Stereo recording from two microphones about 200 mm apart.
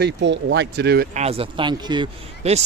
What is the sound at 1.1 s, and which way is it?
Speech, 30° right (ahead or behind).